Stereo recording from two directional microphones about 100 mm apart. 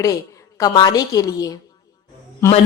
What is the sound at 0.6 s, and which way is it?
Speech, 45° left (ahead or behind).